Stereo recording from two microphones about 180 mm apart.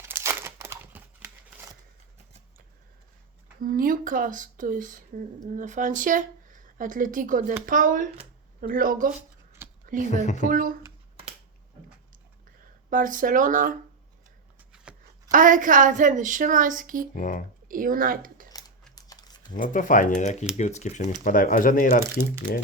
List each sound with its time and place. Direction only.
0.0 s crumpling: 15° right (ahead or behind)
3.6 s speech: 50° right (ahead or behind)
9.8 s a sound: 50° right (ahead or behind)
10.5 s speech: 50° right (ahead or behind)
12.9 s speech: 50° right (ahead or behind)
15.3 s speech: 45° right (ahead or behind)
17.2 s speech: 50° left (ahead or behind)
17.7 s speech: 50° right (ahead or behind)
18.9 s a sound: 20° left (ahead or behind)
19.5 s speech: 45° left (ahead or behind)